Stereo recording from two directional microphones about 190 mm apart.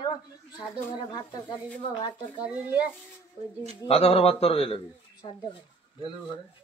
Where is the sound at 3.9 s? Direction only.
30° left (ahead or behind).